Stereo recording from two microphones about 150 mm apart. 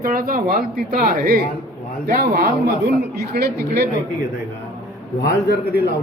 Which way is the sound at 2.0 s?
85° right.